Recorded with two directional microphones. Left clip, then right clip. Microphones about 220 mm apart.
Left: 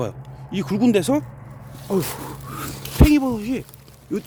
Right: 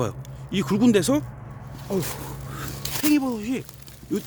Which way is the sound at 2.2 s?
25° left (ahead or behind).